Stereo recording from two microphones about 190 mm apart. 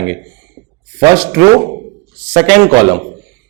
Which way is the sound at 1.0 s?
20° right (ahead or behind).